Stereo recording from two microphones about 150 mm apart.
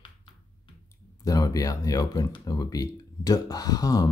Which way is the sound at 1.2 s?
25° left (ahead or behind).